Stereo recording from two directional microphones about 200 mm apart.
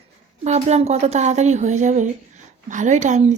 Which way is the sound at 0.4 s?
35° right (ahead or behind).